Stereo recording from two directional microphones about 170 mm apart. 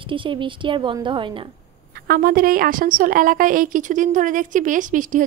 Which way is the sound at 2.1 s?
55° right (ahead or behind).